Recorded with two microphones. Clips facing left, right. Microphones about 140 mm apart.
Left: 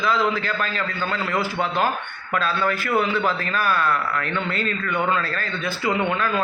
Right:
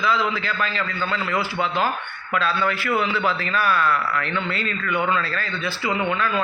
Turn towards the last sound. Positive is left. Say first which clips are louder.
# left 1 dB
turn(degrees=45)  # may be behind; listen again after turning